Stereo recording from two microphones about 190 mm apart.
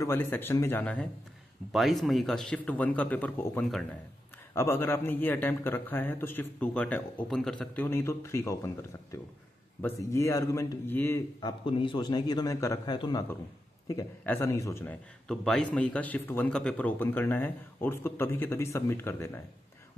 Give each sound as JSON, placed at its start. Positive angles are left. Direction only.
{"t": 0.0, "sound": "a man's voice", "side_deg": 10}
{"t": 15.2, "sound": "a man's voice", "side_deg": 5}